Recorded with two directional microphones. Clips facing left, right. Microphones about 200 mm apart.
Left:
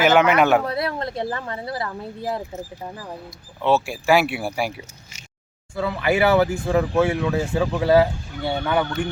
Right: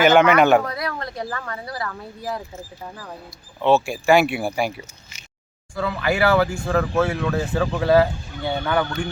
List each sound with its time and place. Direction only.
0.0 s speech: 5° left (ahead or behind)
0.6 s speech: 30° left (ahead or behind)
3.6 s speech: 5° left (ahead or behind)
5.7 s speech: 20° left (ahead or behind)